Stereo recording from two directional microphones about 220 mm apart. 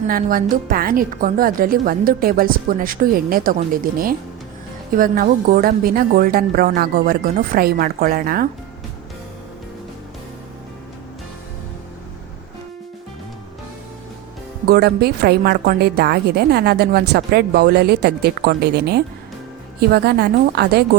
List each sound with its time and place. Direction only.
0.1 s a woman's voice: 40° right (ahead or behind)
14.7 s a woman's voice: 45° right (ahead or behind)